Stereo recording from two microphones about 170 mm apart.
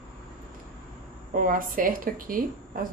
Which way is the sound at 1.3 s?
55° right (ahead or behind).